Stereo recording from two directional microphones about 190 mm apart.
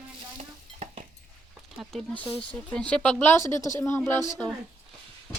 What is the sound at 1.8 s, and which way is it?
A child's voice, centre (ahead or behind).